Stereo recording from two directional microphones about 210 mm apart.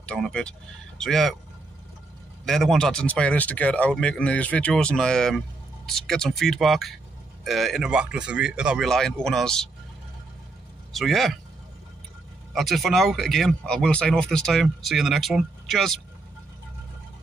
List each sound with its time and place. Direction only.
0.0 s speech: 5° left (ahead or behind)
2.4 s speech: centre (ahead or behind)
10.9 s speech: centre (ahead or behind)
12.5 s speech: centre (ahead or behind)